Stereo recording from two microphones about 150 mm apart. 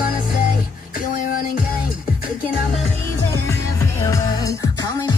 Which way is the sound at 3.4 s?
20° left (ahead or behind).